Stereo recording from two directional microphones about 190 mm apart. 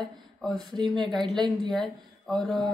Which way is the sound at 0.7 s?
25° right (ahead or behind).